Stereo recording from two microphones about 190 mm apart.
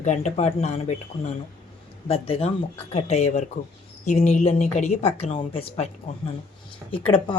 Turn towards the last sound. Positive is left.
turn(degrees=25)  # may be behind; listen again after turning